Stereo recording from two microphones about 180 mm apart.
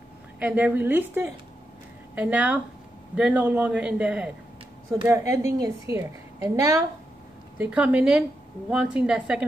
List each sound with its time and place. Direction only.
0.4 s a woman's voice: 10° right (ahead or behind)
7.5 s a woman's voice: 5° right (ahead or behind)